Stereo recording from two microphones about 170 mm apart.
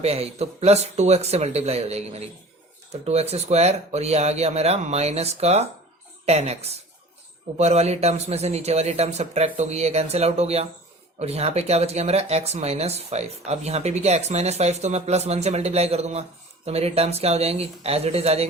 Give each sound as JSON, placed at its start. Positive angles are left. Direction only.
{"t": 0.0, "sound": "speech", "side_deg": -35}